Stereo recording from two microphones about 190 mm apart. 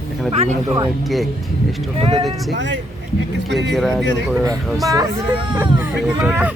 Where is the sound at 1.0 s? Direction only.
Centre (ahead or behind).